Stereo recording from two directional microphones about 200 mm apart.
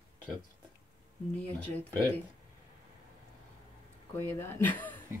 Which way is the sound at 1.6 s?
5° left (ahead or behind).